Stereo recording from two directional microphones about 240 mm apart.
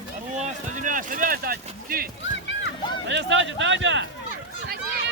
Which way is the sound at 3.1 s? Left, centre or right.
Right.